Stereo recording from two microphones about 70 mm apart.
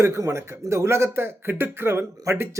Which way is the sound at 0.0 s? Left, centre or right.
Right.